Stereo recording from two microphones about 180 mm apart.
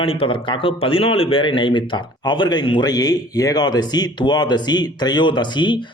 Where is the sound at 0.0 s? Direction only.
30° left (ahead or behind).